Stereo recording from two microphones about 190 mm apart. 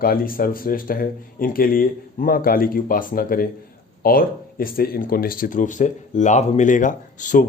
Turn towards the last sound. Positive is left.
turn(degrees=40)  # may be behind; listen again after turning